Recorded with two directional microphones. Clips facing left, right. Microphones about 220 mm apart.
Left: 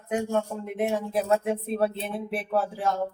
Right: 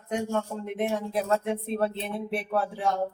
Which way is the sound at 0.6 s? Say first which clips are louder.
Left 1 dB; 5° left (ahead or behind).